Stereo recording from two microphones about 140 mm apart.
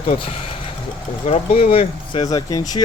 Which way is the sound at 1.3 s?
45° left (ahead or behind).